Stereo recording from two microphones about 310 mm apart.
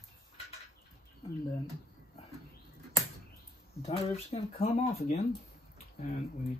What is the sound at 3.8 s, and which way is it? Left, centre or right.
Speech, centre.